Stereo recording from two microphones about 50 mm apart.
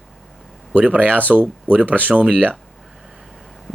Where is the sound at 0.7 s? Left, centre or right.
Right.